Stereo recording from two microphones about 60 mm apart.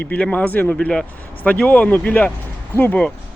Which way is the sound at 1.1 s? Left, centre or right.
Left.